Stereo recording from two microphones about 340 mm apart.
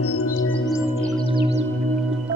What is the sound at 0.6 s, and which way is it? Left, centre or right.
Music, centre.